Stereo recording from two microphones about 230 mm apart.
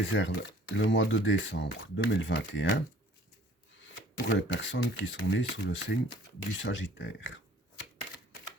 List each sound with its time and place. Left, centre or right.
0.0 s speech: left